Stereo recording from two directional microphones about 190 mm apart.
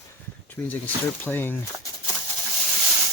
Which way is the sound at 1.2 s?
10° left (ahead or behind).